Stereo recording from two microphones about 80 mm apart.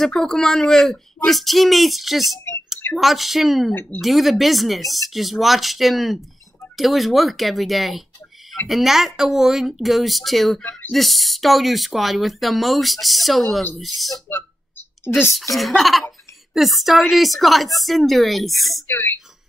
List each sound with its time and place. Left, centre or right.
0.0 s speech: centre
18.9 s speech: left